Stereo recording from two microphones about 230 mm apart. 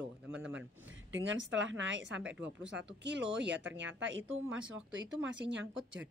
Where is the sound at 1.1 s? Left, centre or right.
Right.